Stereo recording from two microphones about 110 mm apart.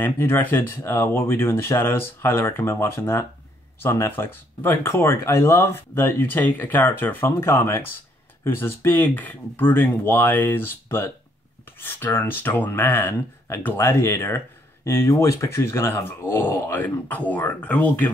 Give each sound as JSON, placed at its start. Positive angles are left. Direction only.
{"t": 0.0, "sound": "speech", "side_deg": 20}